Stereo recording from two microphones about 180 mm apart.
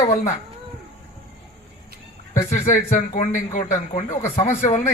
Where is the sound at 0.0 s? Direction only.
40° left (ahead or behind).